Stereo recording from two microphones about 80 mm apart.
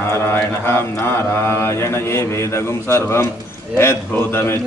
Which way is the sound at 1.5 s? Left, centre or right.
Left.